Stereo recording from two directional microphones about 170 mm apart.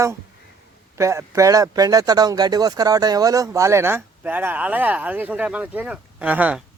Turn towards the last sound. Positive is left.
turn(degrees=-10)  # may be behind; listen again after turning